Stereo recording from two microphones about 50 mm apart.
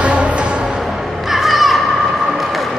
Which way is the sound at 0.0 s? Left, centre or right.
Right.